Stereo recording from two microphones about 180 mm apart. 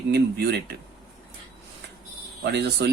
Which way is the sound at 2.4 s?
70° right (ahead or behind).